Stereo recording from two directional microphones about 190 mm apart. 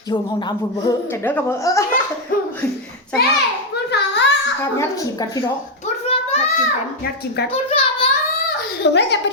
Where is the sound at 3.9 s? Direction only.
65° left (ahead or behind).